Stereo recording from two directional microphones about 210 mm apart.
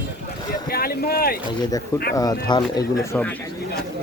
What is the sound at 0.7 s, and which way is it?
Speech, 45° left (ahead or behind).